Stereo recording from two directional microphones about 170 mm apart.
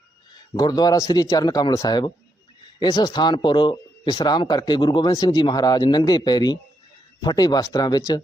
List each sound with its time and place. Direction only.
0.5 s speech: 25° left (ahead or behind)